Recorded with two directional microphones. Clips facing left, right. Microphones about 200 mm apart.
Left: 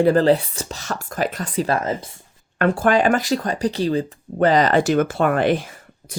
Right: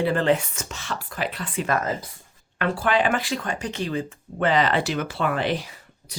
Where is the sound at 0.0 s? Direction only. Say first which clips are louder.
Left 6 dB; 40° left (ahead or behind).